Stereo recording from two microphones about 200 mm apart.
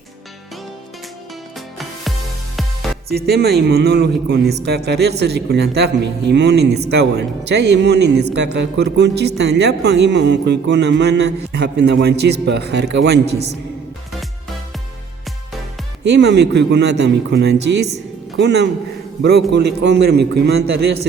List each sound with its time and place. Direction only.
1.5 s music: centre (ahead or behind)
3.1 s speech: 50° right (ahead or behind)
16.0 s speech: 60° right (ahead or behind)